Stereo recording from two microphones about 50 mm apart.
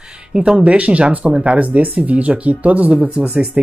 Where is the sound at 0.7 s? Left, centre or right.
Right.